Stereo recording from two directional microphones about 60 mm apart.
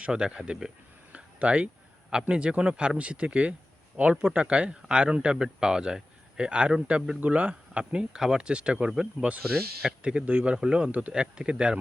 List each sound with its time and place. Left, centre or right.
0.0 s speech: centre
1.1 s a sound: right
2.2 s speech: centre